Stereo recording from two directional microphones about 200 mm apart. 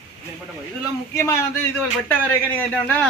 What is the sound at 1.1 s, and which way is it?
A man's voice, 15° left (ahead or behind).